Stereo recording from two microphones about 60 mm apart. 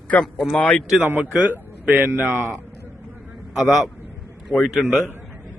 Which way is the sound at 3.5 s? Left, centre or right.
Centre.